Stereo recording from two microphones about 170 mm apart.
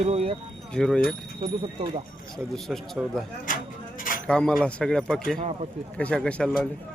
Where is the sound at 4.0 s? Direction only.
55° left (ahead or behind).